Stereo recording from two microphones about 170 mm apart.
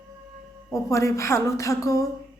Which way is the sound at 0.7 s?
15° left (ahead or behind).